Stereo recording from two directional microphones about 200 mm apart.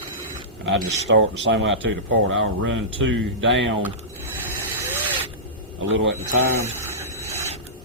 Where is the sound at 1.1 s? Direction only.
70° right (ahead or behind).